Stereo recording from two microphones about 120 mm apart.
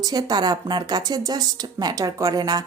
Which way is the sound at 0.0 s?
35° right (ahead or behind).